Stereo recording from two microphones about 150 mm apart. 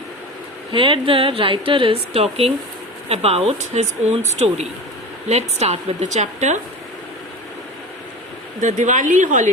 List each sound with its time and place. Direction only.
0.7 s a woman's voice: 35° right (ahead or behind); by 6.6 s 50° right (ahead or behind)
8.6 s a woman's voice: 55° right (ahead or behind)